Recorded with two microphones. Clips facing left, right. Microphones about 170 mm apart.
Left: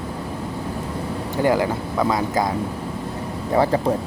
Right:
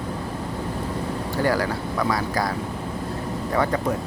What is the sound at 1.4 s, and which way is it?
Speech, 20° left (ahead or behind).